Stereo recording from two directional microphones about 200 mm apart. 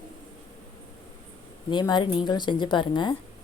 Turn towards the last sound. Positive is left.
turn(degrees=25)  # may be behind; listen again after turning